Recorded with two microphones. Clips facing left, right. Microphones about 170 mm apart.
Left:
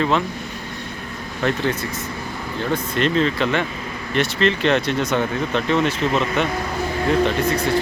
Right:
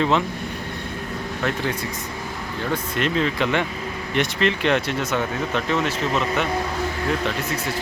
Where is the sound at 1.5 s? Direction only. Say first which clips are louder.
Left 5 dB; 10° right (ahead or behind).